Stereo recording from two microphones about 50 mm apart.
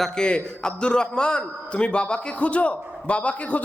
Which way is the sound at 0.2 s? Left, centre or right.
Centre.